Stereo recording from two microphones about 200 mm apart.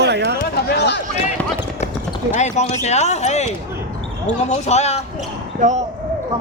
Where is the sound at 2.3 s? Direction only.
35° left (ahead or behind).